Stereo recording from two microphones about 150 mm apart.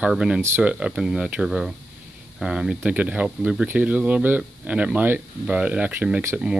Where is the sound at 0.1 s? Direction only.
5° right (ahead or behind).